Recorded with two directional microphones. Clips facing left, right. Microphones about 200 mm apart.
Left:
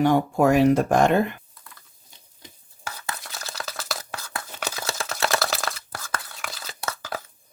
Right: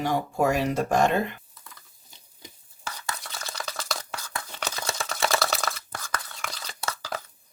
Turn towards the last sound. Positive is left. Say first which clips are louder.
# left 1 dB
turn(degrees=5)  # may be behind; listen again after turning